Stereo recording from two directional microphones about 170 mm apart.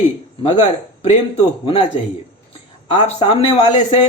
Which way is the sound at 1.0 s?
35° left (ahead or behind).